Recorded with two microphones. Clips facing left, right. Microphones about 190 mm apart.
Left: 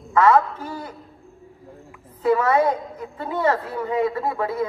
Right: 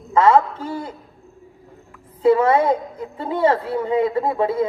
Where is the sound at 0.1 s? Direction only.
25° right (ahead or behind).